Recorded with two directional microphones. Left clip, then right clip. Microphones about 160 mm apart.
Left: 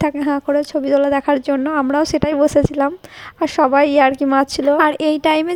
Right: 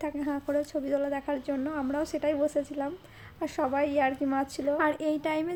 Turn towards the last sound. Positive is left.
turn(degrees=60)  # may be behind; listen again after turning